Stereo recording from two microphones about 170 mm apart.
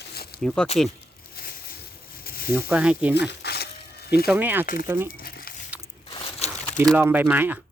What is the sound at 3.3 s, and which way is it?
Crumpling, 75° left (ahead or behind).